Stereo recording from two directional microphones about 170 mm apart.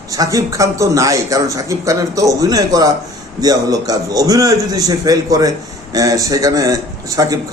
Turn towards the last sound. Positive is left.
turn(degrees=-20)  # may be behind; listen again after turning